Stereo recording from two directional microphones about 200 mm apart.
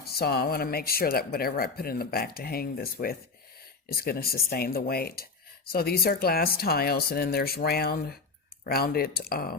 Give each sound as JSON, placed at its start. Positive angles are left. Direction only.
{"t": 0.0, "sound": "speech", "side_deg": 50}